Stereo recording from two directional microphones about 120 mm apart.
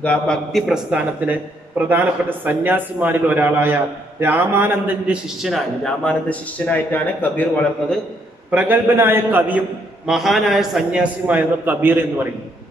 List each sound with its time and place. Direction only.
0.0 s a man's voice: 10° left (ahead or behind)
1.2 s a man's voice: 10° right (ahead or behind)
6.0 s a man's voice: 10° left (ahead or behind)
8.5 s a man's voice: 15° right (ahead or behind)
10.0 s a man's voice: centre (ahead or behind)